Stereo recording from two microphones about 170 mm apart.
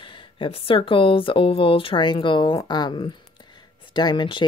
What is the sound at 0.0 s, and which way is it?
Speech, 30° left (ahead or behind).